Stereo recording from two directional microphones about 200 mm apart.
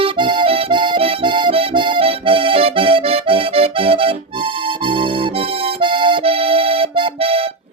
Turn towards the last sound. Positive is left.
turn(degrees=-30)  # may be behind; listen again after turning